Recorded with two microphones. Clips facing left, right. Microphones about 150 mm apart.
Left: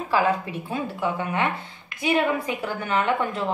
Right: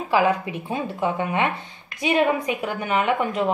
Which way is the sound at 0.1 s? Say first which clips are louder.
Right 2 dB; 15° right (ahead or behind).